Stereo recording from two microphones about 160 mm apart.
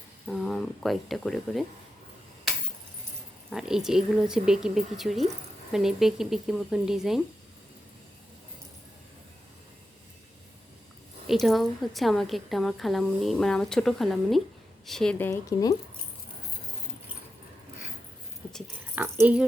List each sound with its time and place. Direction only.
0.3 s speech: centre (ahead or behind)
3.5 s a woman's voice: 5° right (ahead or behind)
11.3 s a woman's voice: centre (ahead or behind)
15.3 s speech: 20° left (ahead or behind)
19.2 s speech: 10° right (ahead or behind)